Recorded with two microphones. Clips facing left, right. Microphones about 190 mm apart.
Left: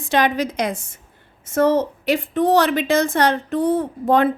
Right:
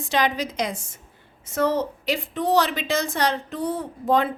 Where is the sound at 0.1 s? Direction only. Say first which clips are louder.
Left 5 dB; 55° left (ahead or behind).